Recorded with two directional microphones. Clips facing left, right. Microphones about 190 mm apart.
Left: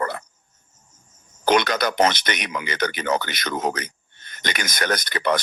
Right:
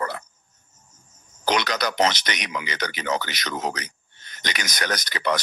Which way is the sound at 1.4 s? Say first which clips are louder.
Left 4 dB; 55° left (ahead or behind).